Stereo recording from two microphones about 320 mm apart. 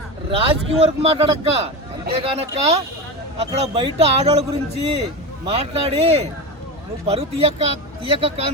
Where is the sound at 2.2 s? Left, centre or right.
Centre.